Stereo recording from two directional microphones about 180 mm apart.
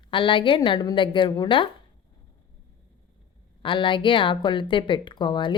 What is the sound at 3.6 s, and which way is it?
A woman's voice, 25° left (ahead or behind).